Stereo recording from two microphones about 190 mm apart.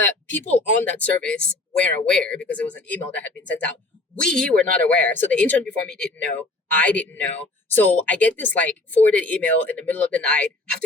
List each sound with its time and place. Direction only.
0.0 s speech: 10° left (ahead or behind)